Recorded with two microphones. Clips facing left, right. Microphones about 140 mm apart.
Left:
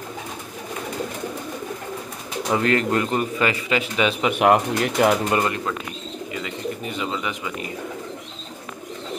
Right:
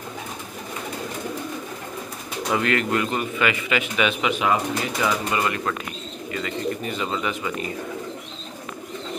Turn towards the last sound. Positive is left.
turn(degrees=15)  # may be behind; listen again after turning